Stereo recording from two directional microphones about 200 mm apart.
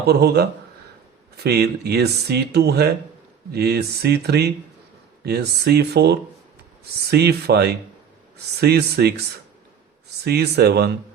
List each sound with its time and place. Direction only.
0.0 s speech: 55° right (ahead or behind)
1.5 s speech: 50° right (ahead or behind)
10.2 s speech: 55° right (ahead or behind)